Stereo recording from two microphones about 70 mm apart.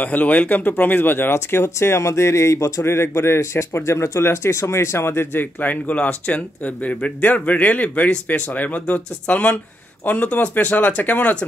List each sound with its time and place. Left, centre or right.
0.0 s speech: left